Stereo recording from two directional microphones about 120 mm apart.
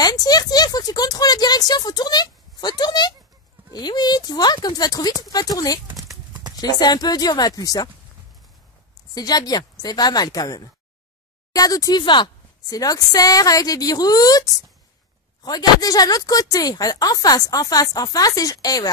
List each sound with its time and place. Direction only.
0.0 s a woman's voice: 35° left (ahead or behind)
9.1 s a woman's voice: 35° left (ahead or behind)